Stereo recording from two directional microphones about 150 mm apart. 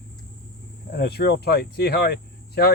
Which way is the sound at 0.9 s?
90° left.